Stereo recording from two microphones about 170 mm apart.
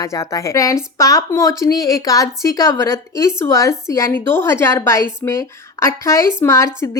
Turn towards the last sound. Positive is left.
turn(degrees=15)  # may be behind; listen again after turning